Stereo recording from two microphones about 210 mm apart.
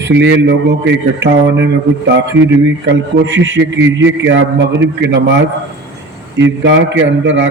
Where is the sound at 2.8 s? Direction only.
60° right (ahead or behind).